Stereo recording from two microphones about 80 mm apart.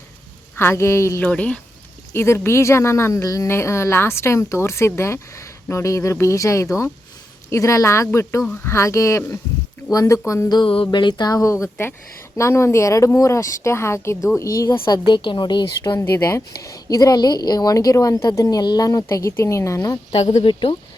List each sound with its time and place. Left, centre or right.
0.5 s a woman's voice: left
1.2 s speech: centre
2.1 s a woman's voice: left
10.5 s music: left
11.3 s a woman's voice: left
16.0 s a woman's voice: left
16.5 s speech: left